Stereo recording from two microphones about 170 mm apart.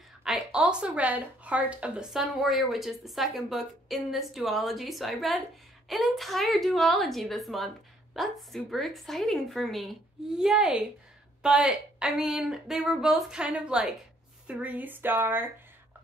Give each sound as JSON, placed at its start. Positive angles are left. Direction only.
{"t": 0.2, "sound": "speech", "side_deg": -5}